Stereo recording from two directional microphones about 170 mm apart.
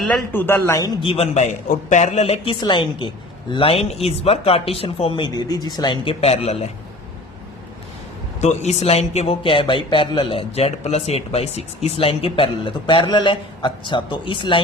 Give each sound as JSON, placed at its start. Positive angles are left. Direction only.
{"t": 0.0, "sound": "speech", "side_deg": 10}
{"t": 1.0, "sound": "speech", "side_deg": 35}
{"t": 8.4, "sound": "speech", "side_deg": 40}